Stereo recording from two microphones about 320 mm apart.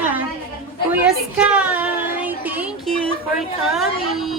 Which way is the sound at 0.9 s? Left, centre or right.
Centre.